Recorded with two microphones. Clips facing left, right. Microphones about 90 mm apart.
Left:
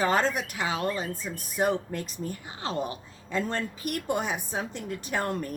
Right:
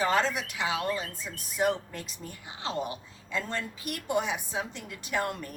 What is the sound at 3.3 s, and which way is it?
A woman's voice, 45° left (ahead or behind).